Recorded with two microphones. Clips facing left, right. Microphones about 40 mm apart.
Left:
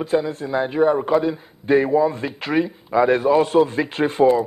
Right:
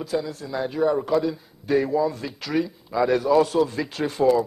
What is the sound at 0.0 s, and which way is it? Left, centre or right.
A man's voice, left.